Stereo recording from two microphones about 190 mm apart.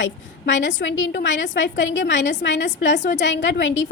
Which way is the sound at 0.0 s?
75° left (ahead or behind).